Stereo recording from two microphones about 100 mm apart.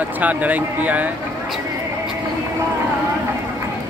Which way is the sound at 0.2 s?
15° right (ahead or behind).